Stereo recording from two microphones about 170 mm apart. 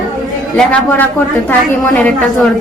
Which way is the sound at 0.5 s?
10° left (ahead or behind).